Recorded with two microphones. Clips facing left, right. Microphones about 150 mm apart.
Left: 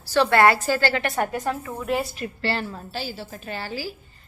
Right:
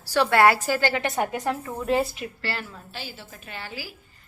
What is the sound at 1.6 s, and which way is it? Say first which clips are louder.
Speech: right 1 dB; centre (ahead or behind).